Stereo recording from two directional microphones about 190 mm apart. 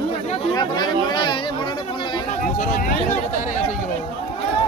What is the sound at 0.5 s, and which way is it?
Speech, 20° left (ahead or behind).